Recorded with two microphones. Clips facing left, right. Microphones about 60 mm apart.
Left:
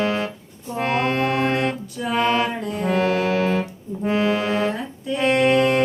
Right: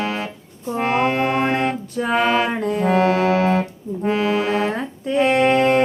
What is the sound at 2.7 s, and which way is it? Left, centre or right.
Brass instrument, right.